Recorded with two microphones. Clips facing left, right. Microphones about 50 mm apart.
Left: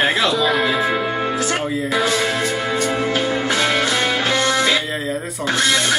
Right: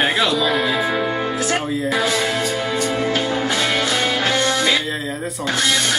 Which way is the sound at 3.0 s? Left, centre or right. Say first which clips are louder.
Left 1 dB; centre.